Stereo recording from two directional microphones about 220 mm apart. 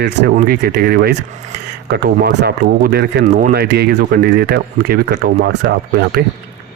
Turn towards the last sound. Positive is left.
turn(degrees=-45)  # may be behind; listen again after turning